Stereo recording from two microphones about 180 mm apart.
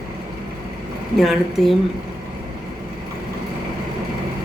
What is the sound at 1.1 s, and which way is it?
Speech, centre (ahead or behind).